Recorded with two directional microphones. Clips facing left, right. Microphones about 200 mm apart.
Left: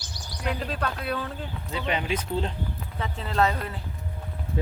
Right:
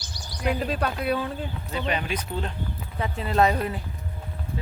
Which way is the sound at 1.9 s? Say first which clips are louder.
Left 1 dB; 20° left (ahead or behind).